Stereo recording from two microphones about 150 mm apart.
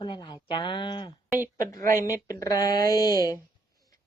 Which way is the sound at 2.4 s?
25° left (ahead or behind).